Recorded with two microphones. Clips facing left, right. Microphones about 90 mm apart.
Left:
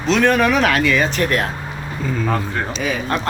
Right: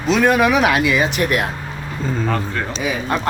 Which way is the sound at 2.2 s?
5° left (ahead or behind).